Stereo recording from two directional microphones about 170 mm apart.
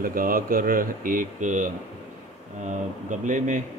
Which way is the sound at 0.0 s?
55° right (ahead or behind).